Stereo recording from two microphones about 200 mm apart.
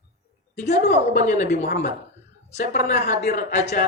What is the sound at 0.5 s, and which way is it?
Speech, 35° left (ahead or behind).